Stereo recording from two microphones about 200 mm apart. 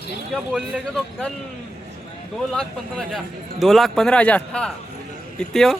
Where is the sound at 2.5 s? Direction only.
Centre (ahead or behind).